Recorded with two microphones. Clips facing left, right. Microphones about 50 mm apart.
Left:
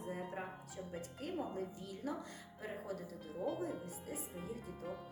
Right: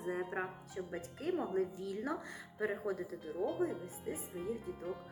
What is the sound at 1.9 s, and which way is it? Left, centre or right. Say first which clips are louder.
A woman's voice: right 4 dB; right.